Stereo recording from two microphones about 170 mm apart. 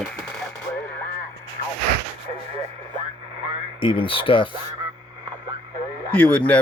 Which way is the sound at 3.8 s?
30° left (ahead or behind).